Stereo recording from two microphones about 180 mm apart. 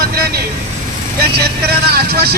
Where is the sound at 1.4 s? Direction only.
60° right (ahead or behind).